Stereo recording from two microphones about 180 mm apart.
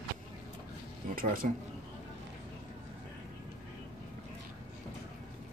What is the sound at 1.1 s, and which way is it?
Speech, 50° right (ahead or behind).